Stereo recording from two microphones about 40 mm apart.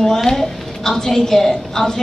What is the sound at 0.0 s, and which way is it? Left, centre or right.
A woman's voice, centre.